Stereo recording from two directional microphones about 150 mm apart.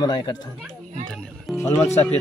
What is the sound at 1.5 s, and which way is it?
Speech, 20° left (ahead or behind).